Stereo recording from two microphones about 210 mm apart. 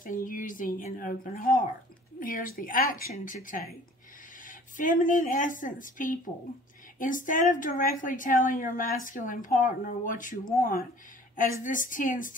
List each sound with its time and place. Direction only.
0.0 s a woman's voice: 40° left (ahead or behind)